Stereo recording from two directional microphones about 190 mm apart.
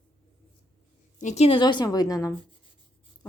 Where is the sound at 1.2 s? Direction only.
35° left (ahead or behind).